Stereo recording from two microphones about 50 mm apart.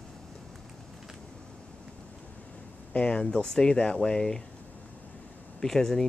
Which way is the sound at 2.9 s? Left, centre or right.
Left.